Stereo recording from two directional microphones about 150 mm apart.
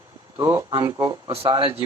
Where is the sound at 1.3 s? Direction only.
40° right (ahead or behind).